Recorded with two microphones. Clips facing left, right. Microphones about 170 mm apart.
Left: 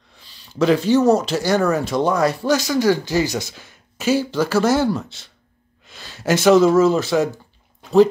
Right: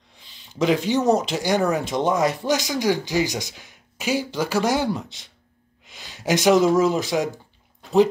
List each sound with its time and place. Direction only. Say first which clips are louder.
0.1 s speech: left 5 dB; 20° right (ahead or behind)